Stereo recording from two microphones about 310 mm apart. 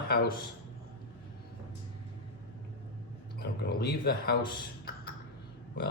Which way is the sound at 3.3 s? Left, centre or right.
Left.